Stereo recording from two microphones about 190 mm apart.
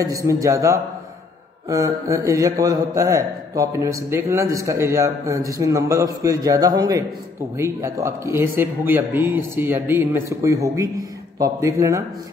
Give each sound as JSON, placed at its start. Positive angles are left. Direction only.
{"t": 0.0, "sound": "a man's voice", "side_deg": -20}